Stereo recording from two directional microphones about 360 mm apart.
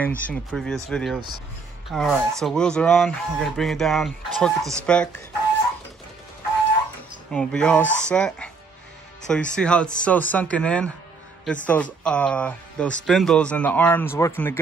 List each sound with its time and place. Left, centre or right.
0.0 s speech: centre
7.3 s speech: centre